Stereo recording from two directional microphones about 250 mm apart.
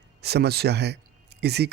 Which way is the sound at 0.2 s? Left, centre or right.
Right.